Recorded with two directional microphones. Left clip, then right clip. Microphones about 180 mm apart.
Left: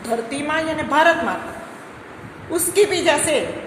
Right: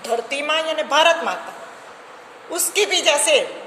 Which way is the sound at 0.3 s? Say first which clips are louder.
Right 1 dB; 50° right (ahead or behind).